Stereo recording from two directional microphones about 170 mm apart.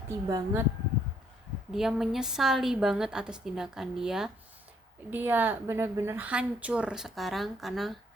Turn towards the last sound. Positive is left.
turn(degrees=0)  # may be behind; listen again after turning